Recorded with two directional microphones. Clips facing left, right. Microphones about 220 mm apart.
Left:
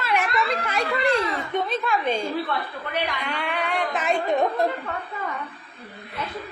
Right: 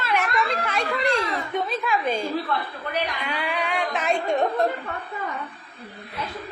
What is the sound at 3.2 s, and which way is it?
Speech, centre (ahead or behind).